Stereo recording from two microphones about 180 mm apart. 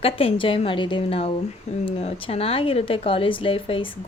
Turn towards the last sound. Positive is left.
turn(degrees=30)  # may be behind; listen again after turning